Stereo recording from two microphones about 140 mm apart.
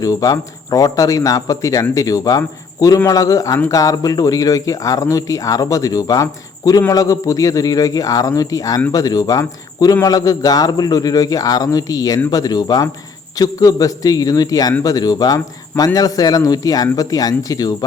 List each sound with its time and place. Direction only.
0.0 s a man's voice: 25° left (ahead or behind)